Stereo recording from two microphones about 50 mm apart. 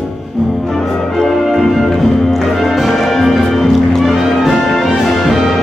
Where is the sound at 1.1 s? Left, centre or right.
Centre.